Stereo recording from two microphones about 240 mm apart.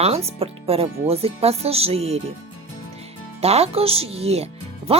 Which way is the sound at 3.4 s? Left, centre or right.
Right.